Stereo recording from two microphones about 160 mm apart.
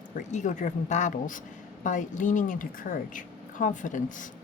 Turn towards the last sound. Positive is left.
turn(degrees=55)  # may be behind; listen again after turning